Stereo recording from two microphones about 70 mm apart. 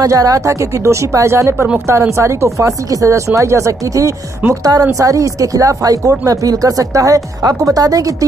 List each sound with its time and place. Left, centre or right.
0.0 s speech: right